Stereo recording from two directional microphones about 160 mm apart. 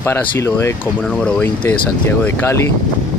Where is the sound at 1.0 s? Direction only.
5° left (ahead or behind).